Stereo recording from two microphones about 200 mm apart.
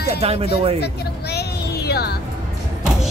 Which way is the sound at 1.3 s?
55° left (ahead or behind).